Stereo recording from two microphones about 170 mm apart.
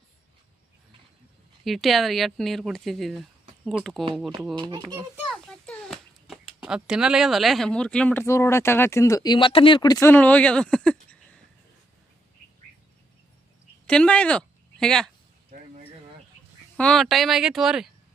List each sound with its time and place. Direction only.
1.6 s speech: centre (ahead or behind)
4.5 s a child's voice: 25° right (ahead or behind)
4.8 s a child's voice: 15° right (ahead or behind)
5.5 s a sound: 5° left (ahead or behind)
6.6 s speech: 5° right (ahead or behind)
13.8 s a woman's voice: 5° left (ahead or behind)
16.7 s speech: 5° left (ahead or behind)